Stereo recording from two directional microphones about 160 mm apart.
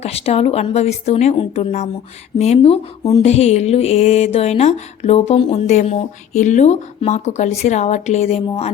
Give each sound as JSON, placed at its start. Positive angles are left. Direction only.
{"t": 0.0, "sound": "speech", "side_deg": 40}